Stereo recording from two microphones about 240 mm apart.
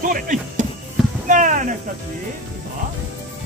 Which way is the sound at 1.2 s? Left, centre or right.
Right.